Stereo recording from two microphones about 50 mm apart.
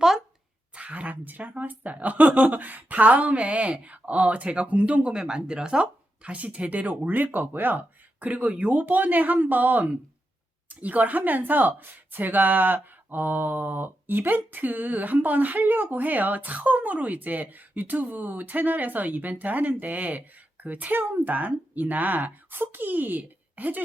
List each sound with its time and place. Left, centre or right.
0.7 s a woman's voice: right
5.1 s a woman's voice: centre; by 23.8 s right